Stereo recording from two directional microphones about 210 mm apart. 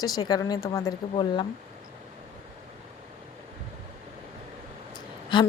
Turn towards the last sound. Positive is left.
turn(degrees=20)  # may be behind; listen again after turning